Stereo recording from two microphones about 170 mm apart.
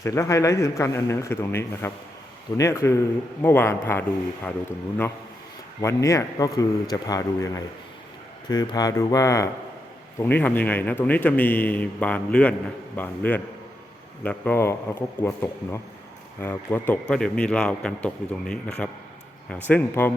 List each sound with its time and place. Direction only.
0.0 s speech: 15° left (ahead or behind)
5.8 s a man's voice: 15° left (ahead or behind)